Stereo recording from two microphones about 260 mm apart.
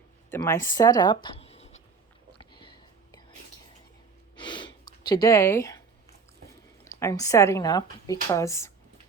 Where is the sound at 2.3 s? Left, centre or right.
Centre.